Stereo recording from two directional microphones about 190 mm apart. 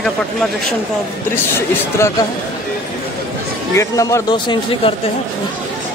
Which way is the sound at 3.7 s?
15° left (ahead or behind).